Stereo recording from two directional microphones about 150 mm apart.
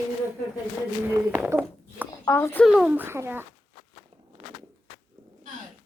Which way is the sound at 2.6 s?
5° right (ahead or behind).